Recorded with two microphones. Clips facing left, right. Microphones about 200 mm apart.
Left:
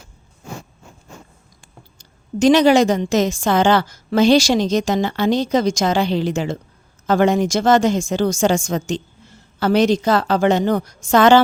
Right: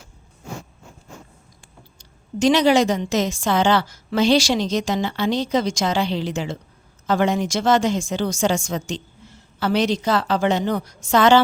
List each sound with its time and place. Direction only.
2.0 s a woman's voice: 45° left (ahead or behind)